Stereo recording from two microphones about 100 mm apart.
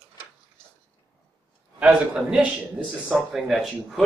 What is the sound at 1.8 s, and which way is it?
A man's voice, 10° right (ahead or behind).